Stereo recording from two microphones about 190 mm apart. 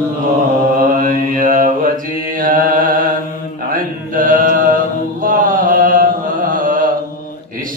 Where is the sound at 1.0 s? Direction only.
45° right (ahead or behind).